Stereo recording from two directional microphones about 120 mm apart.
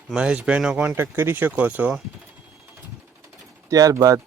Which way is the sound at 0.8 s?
20° right (ahead or behind).